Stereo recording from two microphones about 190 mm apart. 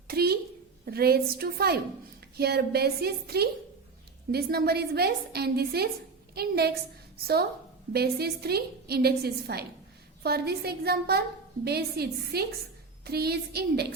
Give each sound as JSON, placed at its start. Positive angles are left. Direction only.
{"t": 0.1, "sound": "a woman's voice", "side_deg": -55}